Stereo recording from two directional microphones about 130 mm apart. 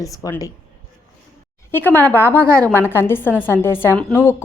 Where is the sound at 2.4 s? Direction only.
20° right (ahead or behind).